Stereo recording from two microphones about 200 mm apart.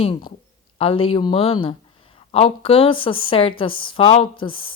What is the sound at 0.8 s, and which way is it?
A woman's voice, 30° left (ahead or behind).